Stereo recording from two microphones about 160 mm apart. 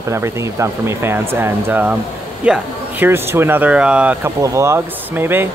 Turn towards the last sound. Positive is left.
turn(degrees=-15)  # may be behind; listen again after turning